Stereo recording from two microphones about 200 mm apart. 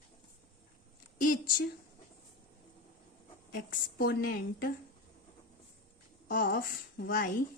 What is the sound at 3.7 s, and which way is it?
A woman's voice, 50° left (ahead or behind).